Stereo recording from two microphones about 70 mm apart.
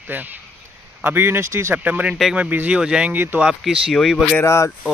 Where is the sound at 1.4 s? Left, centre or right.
Right.